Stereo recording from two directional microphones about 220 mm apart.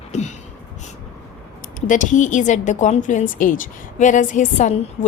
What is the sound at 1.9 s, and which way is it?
A woman's voice, 35° left (ahead or behind).